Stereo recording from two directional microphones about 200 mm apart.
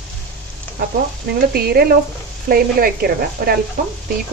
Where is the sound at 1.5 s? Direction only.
50° right (ahead or behind).